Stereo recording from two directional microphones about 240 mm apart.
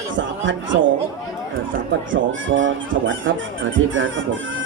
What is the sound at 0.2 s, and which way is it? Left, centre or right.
Speech, right.